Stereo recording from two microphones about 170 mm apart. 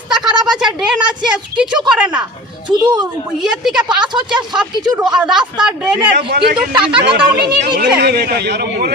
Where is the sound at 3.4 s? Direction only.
5° right (ahead or behind).